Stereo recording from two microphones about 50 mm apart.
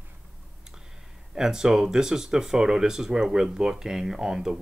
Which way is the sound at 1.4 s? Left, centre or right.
Centre.